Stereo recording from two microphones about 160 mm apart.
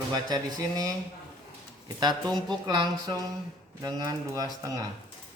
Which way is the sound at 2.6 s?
25° right (ahead or behind).